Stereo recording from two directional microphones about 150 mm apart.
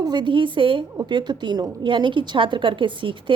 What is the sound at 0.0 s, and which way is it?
A woman's voice, 30° right (ahead or behind).